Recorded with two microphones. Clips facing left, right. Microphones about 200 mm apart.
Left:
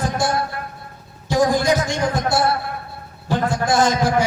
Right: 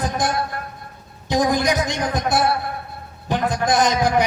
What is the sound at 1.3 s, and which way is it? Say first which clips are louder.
A man's voice: left 2 dB; 20° right (ahead or behind).